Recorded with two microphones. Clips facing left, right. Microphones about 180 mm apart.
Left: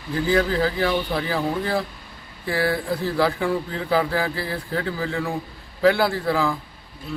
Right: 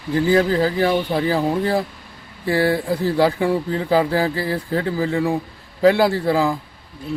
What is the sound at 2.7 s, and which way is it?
Speech, 35° right (ahead or behind).